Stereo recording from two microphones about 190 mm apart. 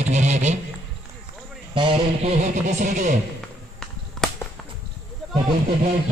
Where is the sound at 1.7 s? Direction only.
25° right (ahead or behind).